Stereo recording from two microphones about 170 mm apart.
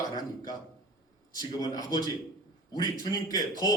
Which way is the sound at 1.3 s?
25° left (ahead or behind).